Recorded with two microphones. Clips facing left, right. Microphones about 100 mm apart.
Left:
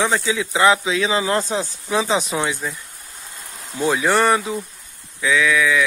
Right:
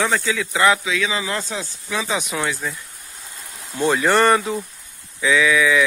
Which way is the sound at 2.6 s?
15° left (ahead or behind).